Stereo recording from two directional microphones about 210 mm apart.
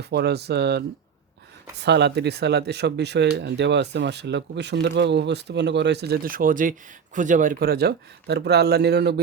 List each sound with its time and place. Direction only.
0.0 s speech: 50° right (ahead or behind)